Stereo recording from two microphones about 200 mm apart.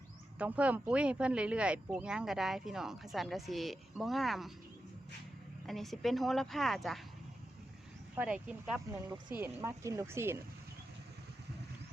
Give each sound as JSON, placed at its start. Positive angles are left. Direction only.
{"t": 0.3, "sound": "speech", "side_deg": -5}
{"t": 5.6, "sound": "speech", "side_deg": 0}
{"t": 8.1, "sound": "speech", "side_deg": -5}
{"t": 8.9, "sound": "speech", "side_deg": -15}